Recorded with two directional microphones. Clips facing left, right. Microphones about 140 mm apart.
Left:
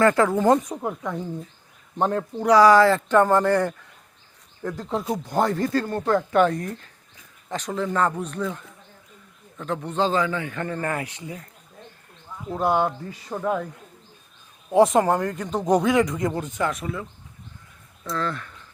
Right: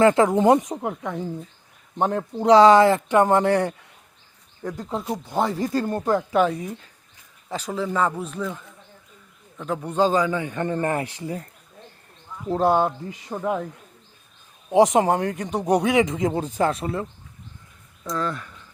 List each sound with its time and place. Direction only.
0.0 s speech: 20° right (ahead or behind)
1.1 s speech: centre (ahead or behind)
2.0 s a man's voice: 15° right (ahead or behind)
2.4 s a man's voice: 25° right (ahead or behind)
4.9 s speech: centre (ahead or behind)
5.6 s a man's voice: 15° right (ahead or behind); by 11.4 s 35° right (ahead or behind)
12.5 s speech: 30° right (ahead or behind)
12.8 s a man's voice: 20° right (ahead or behind)
14.7 s a man's voice: 15° right (ahead or behind)
15.7 s a man's voice: 65° right (ahead or behind)
16.3 s speech: 30° right (ahead or behind)
18.1 s a man's voice: 10° right (ahead or behind)